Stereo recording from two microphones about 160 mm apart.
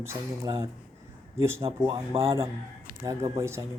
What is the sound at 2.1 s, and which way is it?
Speech, 35° right (ahead or behind).